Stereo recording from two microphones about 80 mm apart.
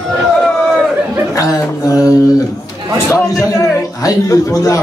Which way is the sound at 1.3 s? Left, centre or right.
Left.